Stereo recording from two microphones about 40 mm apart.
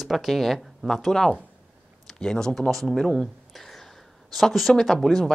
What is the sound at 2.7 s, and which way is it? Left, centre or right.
Speech, centre.